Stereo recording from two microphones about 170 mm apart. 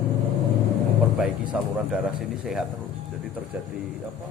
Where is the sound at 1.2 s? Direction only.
5° right (ahead or behind).